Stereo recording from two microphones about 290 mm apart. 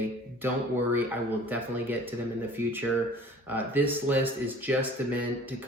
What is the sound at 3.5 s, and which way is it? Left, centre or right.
Speech, centre.